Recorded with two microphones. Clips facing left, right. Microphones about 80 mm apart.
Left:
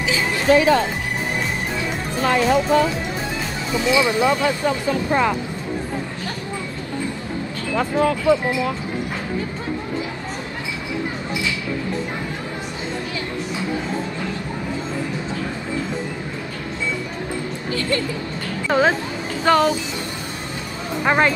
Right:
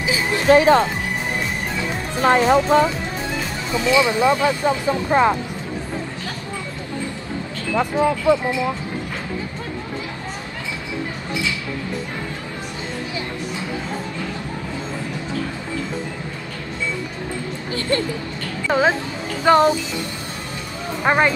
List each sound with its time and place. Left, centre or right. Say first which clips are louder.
0.5 s speech: right 2 dB; right
2.2 s speech: right 3 dB; right
3.9 s speech: right 2 dB; right
7.7 s speech: right 1 dB; centre
18.7 s music: even; centre
21.0 s speech: even; centre